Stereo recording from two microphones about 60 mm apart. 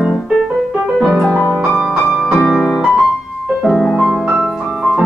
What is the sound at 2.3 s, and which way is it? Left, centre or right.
Music, centre.